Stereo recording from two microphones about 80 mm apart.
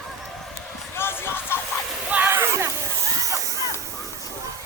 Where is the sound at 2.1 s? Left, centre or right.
Right.